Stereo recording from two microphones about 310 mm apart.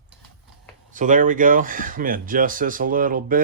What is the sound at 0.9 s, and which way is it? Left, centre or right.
Speech, right.